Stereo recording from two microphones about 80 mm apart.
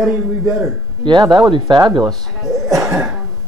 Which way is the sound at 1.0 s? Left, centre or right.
Right.